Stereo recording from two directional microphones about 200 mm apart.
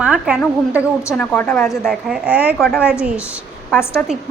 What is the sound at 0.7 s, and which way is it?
A woman's voice, 15° left (ahead or behind).